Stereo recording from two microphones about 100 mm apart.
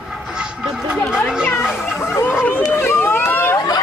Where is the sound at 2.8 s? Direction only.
20° left (ahead or behind).